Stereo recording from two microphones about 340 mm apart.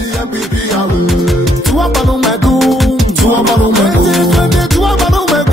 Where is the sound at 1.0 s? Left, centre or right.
Centre.